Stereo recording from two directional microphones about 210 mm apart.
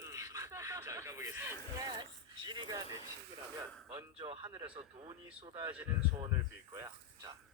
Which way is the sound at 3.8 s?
25° right (ahead or behind).